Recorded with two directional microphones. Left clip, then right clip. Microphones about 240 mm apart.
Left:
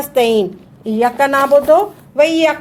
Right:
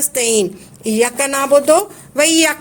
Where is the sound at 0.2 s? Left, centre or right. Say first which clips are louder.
Left 4 dB; right.